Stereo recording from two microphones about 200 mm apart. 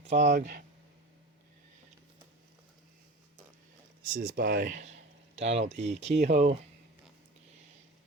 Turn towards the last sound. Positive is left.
turn(degrees=-35)  # may be behind; listen again after turning